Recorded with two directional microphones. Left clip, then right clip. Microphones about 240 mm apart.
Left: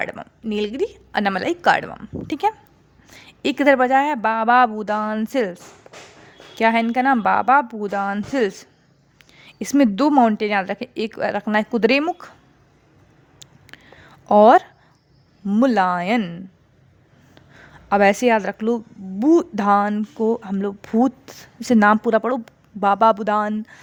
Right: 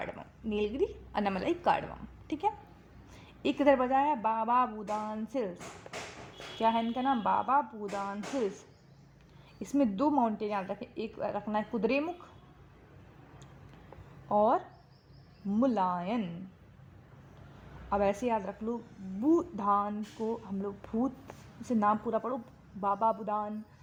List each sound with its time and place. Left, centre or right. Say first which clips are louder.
0.0 s a woman's voice: left 13 dB; left
6.6 s a woman's voice: left 12 dB; left
13.7 s a sound: left 14 dB; left
14.3 s a woman's voice: left 16 dB; left
17.8 s a woman's voice: left 14 dB; left
21.6 s a woman's voice: left 13 dB; left